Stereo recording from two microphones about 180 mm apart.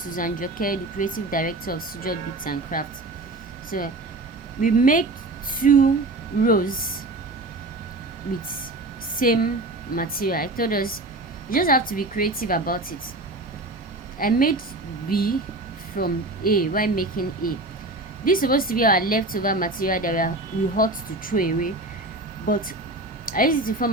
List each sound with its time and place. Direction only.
0.1 s speech: 50° left (ahead or behind)
9.1 s speech: 50° left (ahead or behind)
14.2 s speech: 50° left (ahead or behind)